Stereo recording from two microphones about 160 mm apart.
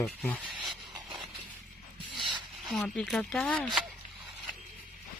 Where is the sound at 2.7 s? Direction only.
Centre (ahead or behind).